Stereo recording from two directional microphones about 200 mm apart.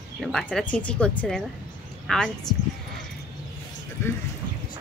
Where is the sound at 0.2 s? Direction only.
5° left (ahead or behind).